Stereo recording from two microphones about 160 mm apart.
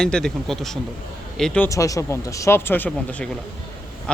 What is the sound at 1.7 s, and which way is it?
Speech, 20° left (ahead or behind).